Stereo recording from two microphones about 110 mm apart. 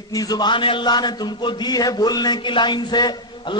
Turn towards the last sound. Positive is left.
turn(degrees=45)  # may be behind; listen again after turning